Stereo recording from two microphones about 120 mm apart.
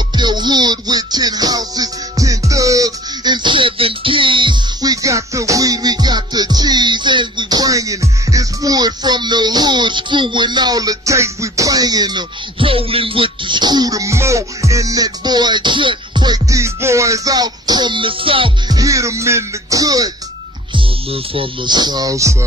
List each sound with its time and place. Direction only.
0.1 s music: 40° right (ahead or behind)
18.7 s music: 30° right (ahead or behind)
20.7 s speech: 50° right (ahead or behind); by 22.4 s 25° right (ahead or behind)